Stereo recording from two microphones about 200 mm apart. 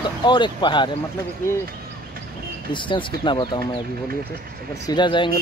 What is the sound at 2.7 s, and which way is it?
Speech, 25° left (ahead or behind).